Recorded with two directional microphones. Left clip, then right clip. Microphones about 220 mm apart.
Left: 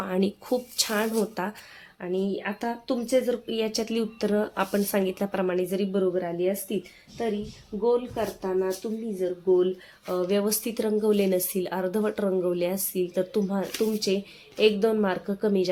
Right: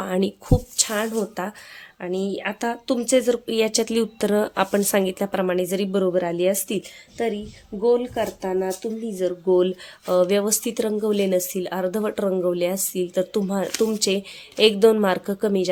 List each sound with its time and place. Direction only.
0.0 s speech: 15° right (ahead or behind); by 6.7 s 35° right (ahead or behind)
7.8 s speech: 35° right (ahead or behind); by 15.7 s 20° right (ahead or behind)